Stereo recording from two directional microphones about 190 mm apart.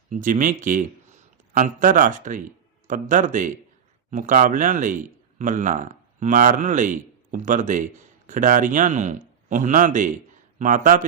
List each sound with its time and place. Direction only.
0.1 s speech: 45° right (ahead or behind)